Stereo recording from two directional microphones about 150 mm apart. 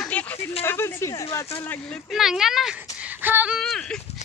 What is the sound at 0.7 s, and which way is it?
Speech, 15° left (ahead or behind).